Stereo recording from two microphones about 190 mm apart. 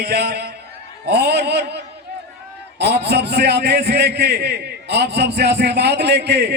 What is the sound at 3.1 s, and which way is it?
A man's voice, 60° right (ahead or behind).